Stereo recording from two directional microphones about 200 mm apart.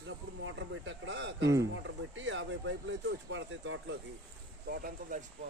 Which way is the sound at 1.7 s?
70° right (ahead or behind).